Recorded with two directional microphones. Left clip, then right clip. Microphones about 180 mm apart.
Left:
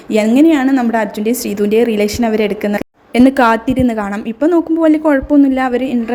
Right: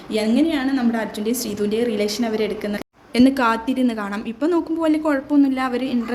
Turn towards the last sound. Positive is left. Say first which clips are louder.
# left 7 dB
turn(degrees=30)  # may be behind; listen again after turning